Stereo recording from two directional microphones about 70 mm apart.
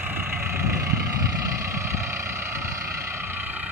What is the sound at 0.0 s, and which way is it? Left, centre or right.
Vehicle, right.